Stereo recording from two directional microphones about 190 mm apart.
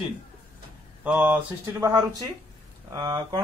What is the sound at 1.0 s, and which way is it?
Speech, 10° right (ahead or behind).